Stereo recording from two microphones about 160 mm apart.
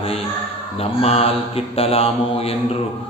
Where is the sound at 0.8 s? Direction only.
40° left (ahead or behind).